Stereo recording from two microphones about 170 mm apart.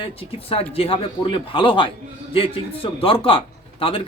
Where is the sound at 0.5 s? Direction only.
35° left (ahead or behind).